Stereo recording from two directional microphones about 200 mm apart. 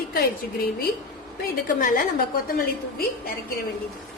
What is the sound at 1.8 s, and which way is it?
A woman's voice, 45° left (ahead or behind).